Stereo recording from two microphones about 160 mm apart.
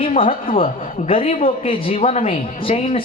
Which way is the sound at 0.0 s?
35° left (ahead or behind).